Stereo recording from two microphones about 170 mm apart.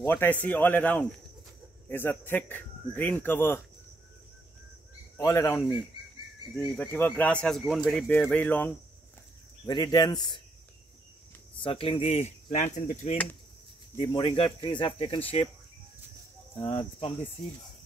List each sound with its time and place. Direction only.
0.0 s speech: 10° left (ahead or behind)
5.2 s speech: 15° left (ahead or behind)
6.5 s speech: 5° left (ahead or behind)
9.7 s speech: 25° left (ahead or behind)
11.6 s speech: 30° left (ahead or behind)
12.4 s speech: 45° left (ahead or behind)
13.9 s speech: 35° left (ahead or behind)
16.5 s speech: 30° left (ahead or behind)